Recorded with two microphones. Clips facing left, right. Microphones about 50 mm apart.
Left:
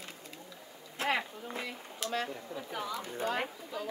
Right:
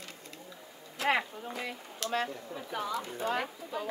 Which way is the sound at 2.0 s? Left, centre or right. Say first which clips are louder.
Right 2 dB; centre.